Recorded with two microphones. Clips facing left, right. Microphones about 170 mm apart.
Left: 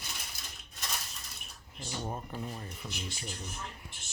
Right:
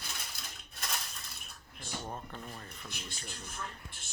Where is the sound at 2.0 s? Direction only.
10° left (ahead or behind).